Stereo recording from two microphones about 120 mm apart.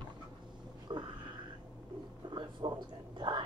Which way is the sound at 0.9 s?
40° right (ahead or behind).